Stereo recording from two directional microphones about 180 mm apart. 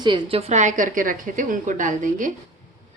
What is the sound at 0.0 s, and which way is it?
A woman's voice, 30° right (ahead or behind).